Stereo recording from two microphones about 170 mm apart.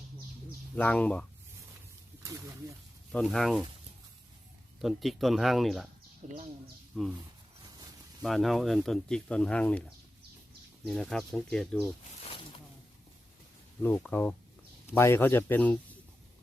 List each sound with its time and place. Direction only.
0.8 s speech: 10° left (ahead or behind)
2.2 s speech: 20° right (ahead or behind)
3.1 s speech: 5° left (ahead or behind)
4.8 s speech: centre (ahead or behind)
6.2 s speech: 45° right (ahead or behind)
6.9 s speech: centre (ahead or behind)
8.2 s speech: centre (ahead or behind)
10.8 s speech: centre (ahead or behind)
12.2 s a sound: 30° left (ahead or behind)
13.8 s speech: 10° left (ahead or behind)